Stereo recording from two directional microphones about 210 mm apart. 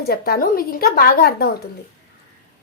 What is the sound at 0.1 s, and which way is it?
A woman's voice, 45° left (ahead or behind).